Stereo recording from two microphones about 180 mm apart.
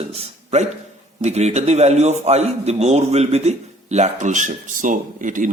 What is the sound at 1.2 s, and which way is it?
A man's voice, 40° right (ahead or behind).